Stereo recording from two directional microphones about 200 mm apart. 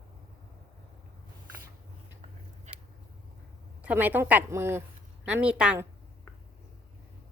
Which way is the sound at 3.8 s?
10° right (ahead or behind).